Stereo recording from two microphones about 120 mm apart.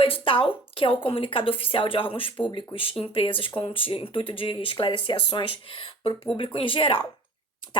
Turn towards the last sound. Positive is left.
turn(degrees=45)  # may be behind; listen again after turning